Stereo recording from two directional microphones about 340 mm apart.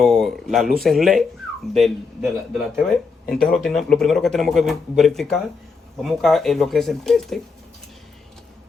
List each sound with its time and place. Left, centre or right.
0.0 s speech: centre